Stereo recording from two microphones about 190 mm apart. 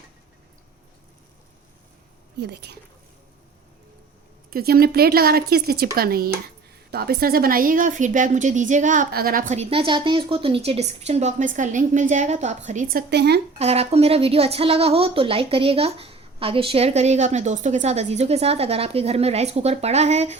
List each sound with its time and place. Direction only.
2.4 s speech: 60° right (ahead or behind)
4.5 s a woman's voice: 50° right (ahead or behind)
13.6 s a woman's voice: 35° right (ahead or behind)